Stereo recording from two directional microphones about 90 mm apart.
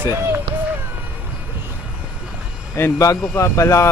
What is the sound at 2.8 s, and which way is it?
Speech, 35° left (ahead or behind).